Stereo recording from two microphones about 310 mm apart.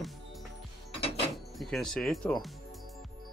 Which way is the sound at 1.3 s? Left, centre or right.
Centre.